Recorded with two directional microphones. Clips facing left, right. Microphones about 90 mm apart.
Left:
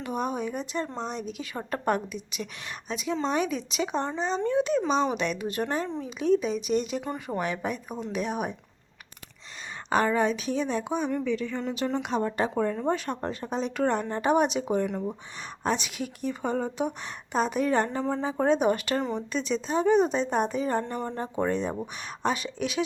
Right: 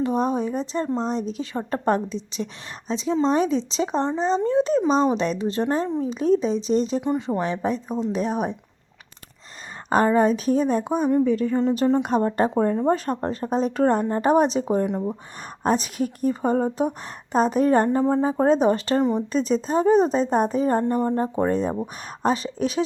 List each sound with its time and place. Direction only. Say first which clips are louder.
0.0 s speech: right 7 dB; 35° right (ahead or behind)
9.9 s speech: right 6 dB; 40° right (ahead or behind)
14.8 s speech: right 5 dB; 25° right (ahead or behind)
15.6 s speech: right 7 dB; 40° right (ahead or behind)